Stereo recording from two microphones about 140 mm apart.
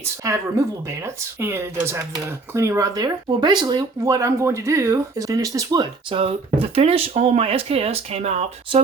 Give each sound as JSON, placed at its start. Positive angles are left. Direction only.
{"t": 0.0, "sound": "speech", "side_deg": -20}
{"t": 6.1, "sound": "speech", "side_deg": -45}